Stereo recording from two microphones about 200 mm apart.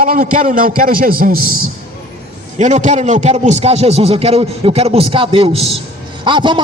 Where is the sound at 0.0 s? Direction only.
45° right (ahead or behind).